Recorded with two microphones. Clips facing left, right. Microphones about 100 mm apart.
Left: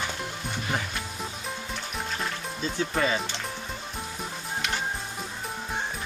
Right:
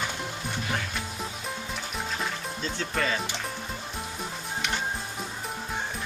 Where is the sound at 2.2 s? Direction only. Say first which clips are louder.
Even; 10° left (ahead or behind).